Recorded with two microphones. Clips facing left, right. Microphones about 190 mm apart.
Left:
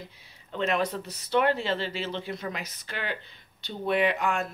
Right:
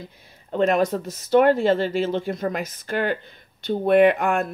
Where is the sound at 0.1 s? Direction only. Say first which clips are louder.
Right 9 dB; 50° right (ahead or behind).